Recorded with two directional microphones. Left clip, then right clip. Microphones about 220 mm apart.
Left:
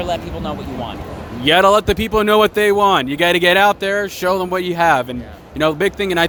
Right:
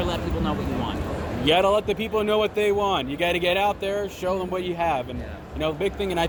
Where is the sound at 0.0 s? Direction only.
55° left (ahead or behind).